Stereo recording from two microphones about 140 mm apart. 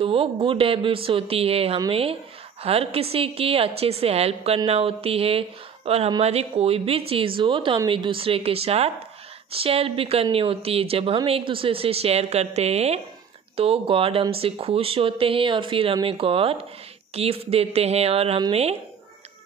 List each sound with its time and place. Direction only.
0.0 s speech: 40° right (ahead or behind)